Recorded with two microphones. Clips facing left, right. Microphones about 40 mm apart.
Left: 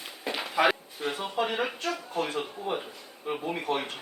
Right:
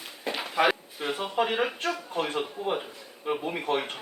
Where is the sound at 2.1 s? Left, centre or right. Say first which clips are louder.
Right 1 dB; right.